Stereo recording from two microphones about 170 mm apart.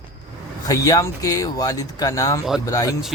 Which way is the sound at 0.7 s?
20° left (ahead or behind).